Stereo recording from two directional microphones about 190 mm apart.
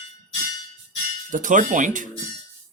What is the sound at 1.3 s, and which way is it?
Speech, 45° right (ahead or behind).